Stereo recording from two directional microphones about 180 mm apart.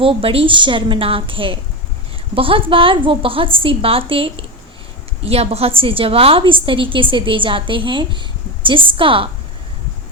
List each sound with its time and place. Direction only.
0.0 s a woman's voice: 30° right (ahead or behind)